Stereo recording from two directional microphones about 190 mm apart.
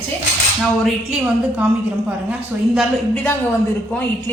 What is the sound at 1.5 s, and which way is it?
A woman's voice, 5° right (ahead or behind).